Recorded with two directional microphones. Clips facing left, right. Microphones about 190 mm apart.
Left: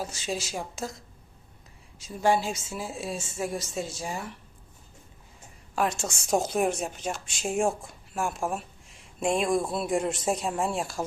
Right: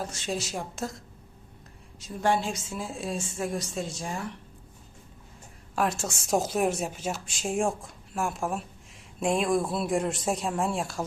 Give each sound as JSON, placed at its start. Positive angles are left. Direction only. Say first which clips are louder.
{"t": 0.0, "sound": "a woman's voice", "louder": "even", "side_deg": 0}
{"t": 5.7, "sound": "a woman's voice", "louder": "even", "side_deg": 0}